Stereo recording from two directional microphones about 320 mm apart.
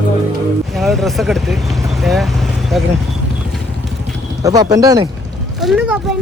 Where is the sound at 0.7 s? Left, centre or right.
Centre.